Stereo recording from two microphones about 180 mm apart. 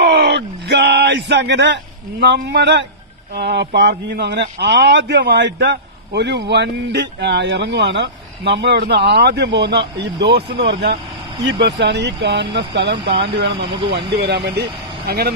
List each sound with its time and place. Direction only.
0.0 s a sound: 70° right (ahead or behind)
3.3 s a man's voice: 70° right (ahead or behind)
13.7 s speech: 30° right (ahead or behind)
14.1 s speech: 65° right (ahead or behind)